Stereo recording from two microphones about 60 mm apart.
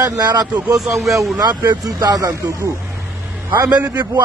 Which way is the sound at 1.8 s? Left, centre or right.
Right.